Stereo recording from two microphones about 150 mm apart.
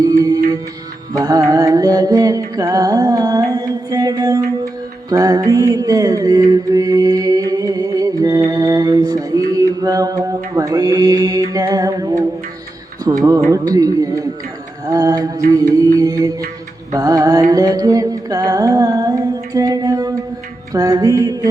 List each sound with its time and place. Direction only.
0.0 s music: 25° right (ahead or behind)
5.0 s mantra: 25° right (ahead or behind)
13.1 s music: 25° right (ahead or behind)